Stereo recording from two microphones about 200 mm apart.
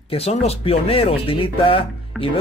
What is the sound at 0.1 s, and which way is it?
Speech, 30° left (ahead or behind).